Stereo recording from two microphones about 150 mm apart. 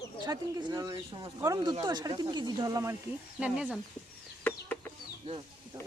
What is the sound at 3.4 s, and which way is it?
Speech, 5° right (ahead or behind).